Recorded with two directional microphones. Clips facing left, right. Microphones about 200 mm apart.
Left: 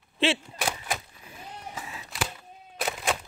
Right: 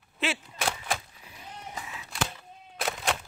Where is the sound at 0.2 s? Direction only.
30° left (ahead or behind).